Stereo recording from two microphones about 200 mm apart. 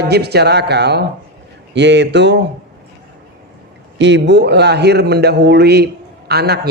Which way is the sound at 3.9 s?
60° right (ahead or behind).